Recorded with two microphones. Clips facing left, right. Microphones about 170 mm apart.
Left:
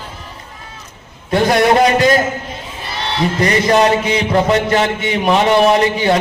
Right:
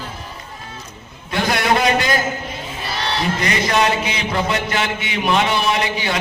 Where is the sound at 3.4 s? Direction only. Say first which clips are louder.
Left 7 dB; 35° left (ahead or behind).